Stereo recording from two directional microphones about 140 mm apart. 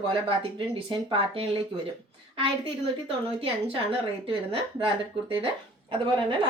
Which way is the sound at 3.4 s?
40° right (ahead or behind).